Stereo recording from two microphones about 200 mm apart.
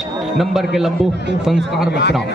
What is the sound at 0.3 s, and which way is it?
Speech, centre (ahead or behind).